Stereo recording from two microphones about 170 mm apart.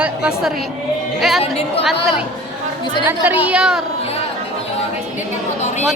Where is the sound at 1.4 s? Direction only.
35° left (ahead or behind).